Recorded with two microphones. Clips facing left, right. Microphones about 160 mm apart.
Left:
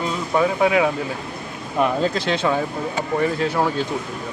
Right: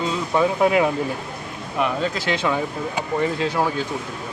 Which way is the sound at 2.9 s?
10° right (ahead or behind).